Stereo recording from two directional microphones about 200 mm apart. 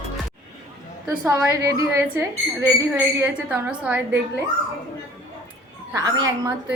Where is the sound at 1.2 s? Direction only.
15° right (ahead or behind).